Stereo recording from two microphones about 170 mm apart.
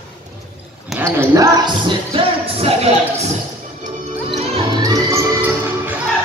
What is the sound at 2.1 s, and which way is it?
Music, 35° right (ahead or behind).